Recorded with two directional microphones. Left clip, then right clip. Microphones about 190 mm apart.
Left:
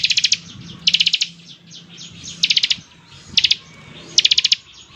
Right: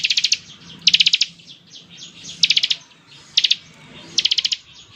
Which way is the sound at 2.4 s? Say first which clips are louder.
Even; 25° right (ahead or behind).